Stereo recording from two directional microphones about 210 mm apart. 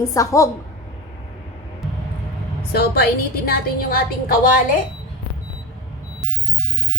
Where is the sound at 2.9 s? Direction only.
45° left (ahead or behind).